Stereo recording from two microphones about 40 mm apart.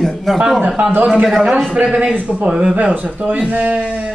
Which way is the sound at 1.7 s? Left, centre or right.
Right.